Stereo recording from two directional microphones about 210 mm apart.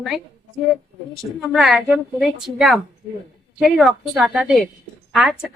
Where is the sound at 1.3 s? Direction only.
Centre (ahead or behind).